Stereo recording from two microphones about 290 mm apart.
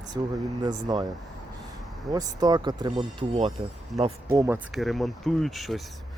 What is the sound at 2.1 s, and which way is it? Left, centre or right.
Speech, centre.